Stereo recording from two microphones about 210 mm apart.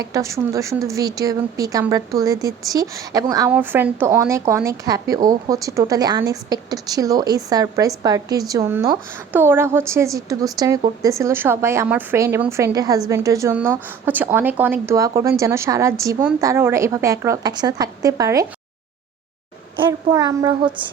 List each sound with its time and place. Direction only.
0.0 s a woman's voice: 15° right (ahead or behind)
19.8 s a woman's voice: 15° right (ahead or behind)